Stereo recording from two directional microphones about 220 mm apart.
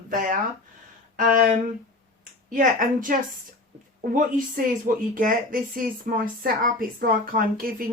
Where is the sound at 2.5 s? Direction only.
40° right (ahead or behind).